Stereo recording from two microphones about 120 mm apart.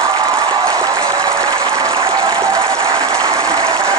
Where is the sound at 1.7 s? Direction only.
25° right (ahead or behind).